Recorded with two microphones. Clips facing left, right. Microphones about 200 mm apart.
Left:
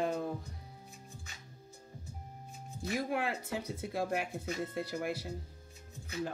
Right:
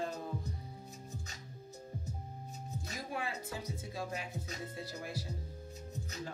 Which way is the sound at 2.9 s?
65° left (ahead or behind).